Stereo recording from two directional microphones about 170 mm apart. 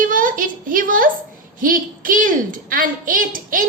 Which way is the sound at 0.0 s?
50° right (ahead or behind).